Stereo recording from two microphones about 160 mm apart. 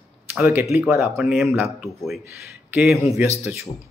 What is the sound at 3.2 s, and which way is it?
Speech, 40° left (ahead or behind).